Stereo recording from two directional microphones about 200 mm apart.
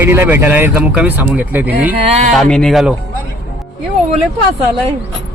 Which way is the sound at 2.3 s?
Centre (ahead or behind).